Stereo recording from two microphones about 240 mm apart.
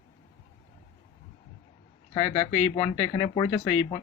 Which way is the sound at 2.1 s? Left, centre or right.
Centre.